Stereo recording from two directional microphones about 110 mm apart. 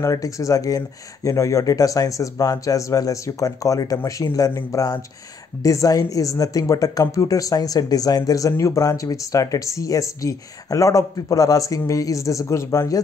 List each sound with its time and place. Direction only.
0.0 s speech: 30° left (ahead or behind)